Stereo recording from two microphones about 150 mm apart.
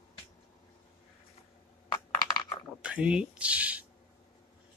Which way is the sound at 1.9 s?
25° left (ahead or behind).